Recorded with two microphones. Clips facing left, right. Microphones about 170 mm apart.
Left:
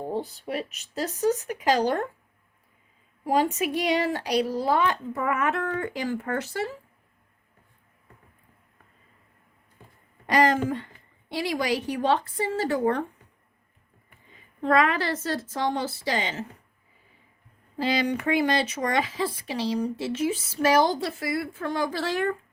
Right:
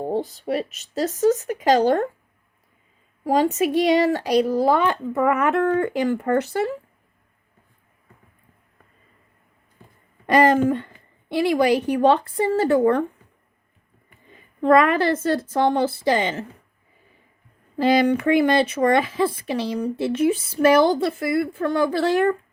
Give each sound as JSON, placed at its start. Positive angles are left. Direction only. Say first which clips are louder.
{"t": 0.4, "sound": "speech", "louder": "right 7 dB", "side_deg": -40}
{"t": 3.2, "sound": "speech", "louder": "right 5 dB", "side_deg": -40}
{"t": 10.2, "sound": "speech", "louder": "right 6 dB", "side_deg": -55}
{"t": 14.6, "sound": "speech", "louder": "right 6 dB", "side_deg": -55}
{"t": 17.7, "sound": "speech", "louder": "right 8 dB", "side_deg": -50}